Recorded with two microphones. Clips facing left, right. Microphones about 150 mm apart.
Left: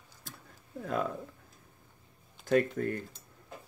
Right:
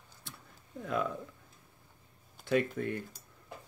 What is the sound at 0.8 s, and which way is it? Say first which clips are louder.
Speech: left 1 dB; 45° left (ahead or behind).